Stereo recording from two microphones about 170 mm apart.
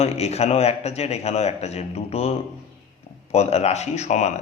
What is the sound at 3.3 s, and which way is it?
Speech, 40° left (ahead or behind).